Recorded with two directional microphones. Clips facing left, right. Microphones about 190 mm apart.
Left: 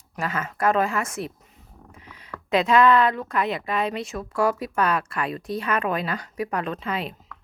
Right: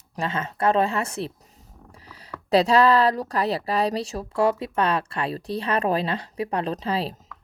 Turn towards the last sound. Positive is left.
turn(degrees=-30)  # may be behind; listen again after turning